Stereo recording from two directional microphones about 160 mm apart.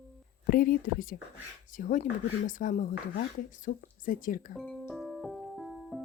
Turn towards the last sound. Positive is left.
turn(degrees=0)  # may be behind; listen again after turning